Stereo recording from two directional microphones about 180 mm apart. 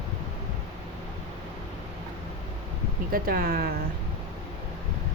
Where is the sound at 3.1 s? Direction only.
55° right (ahead or behind).